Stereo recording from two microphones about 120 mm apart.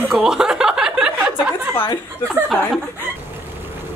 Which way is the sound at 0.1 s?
5° right (ahead or behind).